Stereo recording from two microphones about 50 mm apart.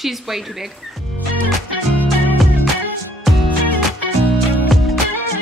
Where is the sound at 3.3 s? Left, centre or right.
Centre.